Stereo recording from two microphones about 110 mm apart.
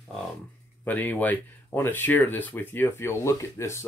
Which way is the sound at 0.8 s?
15° left (ahead or behind).